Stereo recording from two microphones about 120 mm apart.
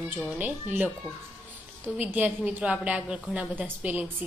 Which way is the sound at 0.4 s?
15° right (ahead or behind).